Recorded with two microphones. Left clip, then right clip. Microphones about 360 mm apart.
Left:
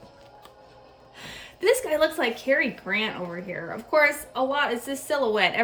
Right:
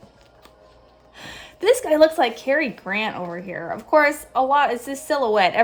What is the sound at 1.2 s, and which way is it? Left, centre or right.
Speech, centre.